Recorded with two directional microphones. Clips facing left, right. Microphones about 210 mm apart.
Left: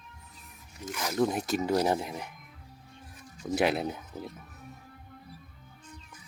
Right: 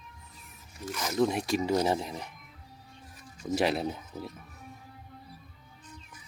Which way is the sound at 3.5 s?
Centre (ahead or behind).